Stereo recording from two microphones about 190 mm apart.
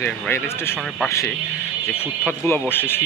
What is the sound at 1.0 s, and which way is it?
Speech, 15° left (ahead or behind).